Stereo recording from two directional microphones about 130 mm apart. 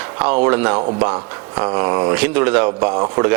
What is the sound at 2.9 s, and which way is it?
Speech, 30° right (ahead or behind).